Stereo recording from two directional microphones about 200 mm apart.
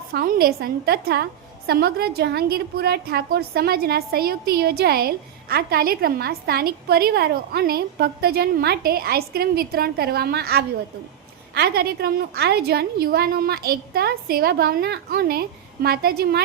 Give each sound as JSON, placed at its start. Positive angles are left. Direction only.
{"t": 0.1, "sound": "a woman's voice", "side_deg": -50}